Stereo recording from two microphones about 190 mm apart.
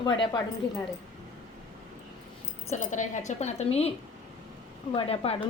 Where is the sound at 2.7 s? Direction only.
40° left (ahead or behind).